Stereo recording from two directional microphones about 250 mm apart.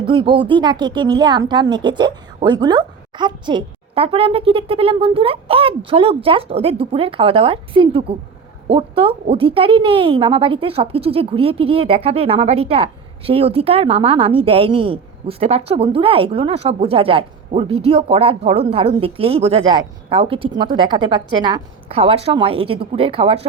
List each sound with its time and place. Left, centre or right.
0.1 s speech: centre